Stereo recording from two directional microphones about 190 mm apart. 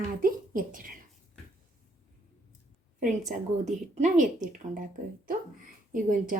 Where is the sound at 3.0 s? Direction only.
40° right (ahead or behind).